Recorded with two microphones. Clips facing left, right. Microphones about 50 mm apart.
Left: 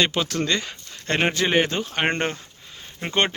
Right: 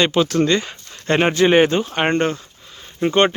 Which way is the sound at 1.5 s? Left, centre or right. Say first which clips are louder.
Right 7 dB; right.